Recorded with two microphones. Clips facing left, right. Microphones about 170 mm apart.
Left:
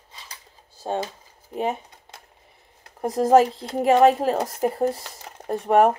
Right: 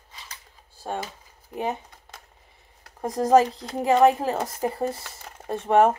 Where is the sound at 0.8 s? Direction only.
25° left (ahead or behind).